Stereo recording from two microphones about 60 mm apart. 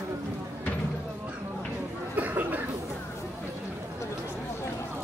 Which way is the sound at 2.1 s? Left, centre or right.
Right.